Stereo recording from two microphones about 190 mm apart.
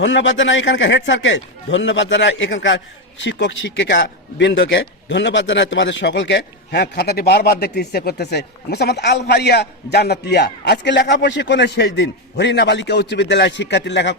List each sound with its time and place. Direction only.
0.0 s a man's voice: 75° left (ahead or behind)